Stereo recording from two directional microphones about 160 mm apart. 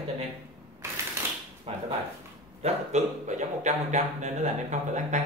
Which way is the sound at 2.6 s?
45° right (ahead or behind).